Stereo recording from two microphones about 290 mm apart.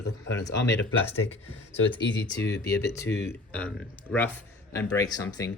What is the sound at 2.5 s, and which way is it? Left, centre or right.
Speech, left.